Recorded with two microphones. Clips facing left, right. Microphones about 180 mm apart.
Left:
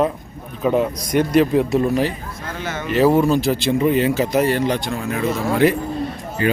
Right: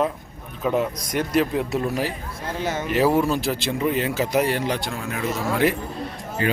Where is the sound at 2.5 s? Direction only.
35° right (ahead or behind).